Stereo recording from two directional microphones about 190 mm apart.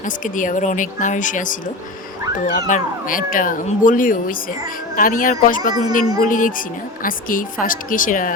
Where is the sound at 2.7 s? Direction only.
45° left (ahead or behind).